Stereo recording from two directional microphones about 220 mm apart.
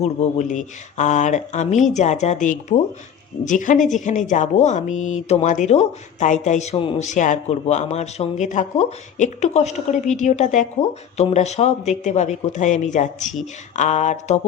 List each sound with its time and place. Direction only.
0.0 s a woman's voice: 30° left (ahead or behind)